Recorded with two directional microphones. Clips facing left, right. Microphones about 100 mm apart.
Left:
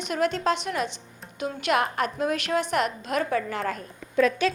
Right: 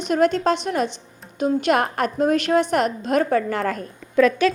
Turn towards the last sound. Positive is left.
turn(degrees=-65)  # may be behind; listen again after turning